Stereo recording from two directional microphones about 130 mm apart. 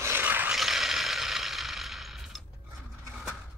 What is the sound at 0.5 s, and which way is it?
Mechanisms, centre (ahead or behind).